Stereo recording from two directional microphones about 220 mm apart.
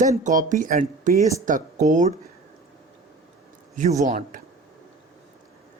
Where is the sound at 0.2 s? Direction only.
35° right (ahead or behind).